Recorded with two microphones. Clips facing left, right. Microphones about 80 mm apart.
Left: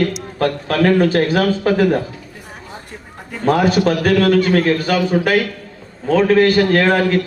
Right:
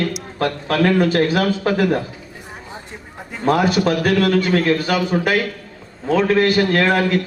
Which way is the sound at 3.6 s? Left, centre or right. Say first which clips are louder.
Left 2 dB; left.